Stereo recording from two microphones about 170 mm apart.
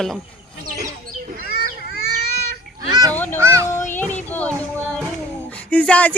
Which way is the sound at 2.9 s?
20° right (ahead or behind).